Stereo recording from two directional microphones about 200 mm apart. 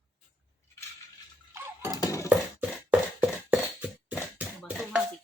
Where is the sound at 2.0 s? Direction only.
15° left (ahead or behind).